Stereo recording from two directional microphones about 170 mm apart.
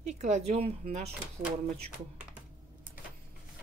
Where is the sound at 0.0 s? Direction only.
45° right (ahead or behind).